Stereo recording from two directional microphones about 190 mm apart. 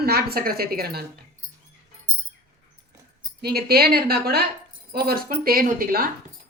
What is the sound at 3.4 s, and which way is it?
Speech, 55° right (ahead or behind).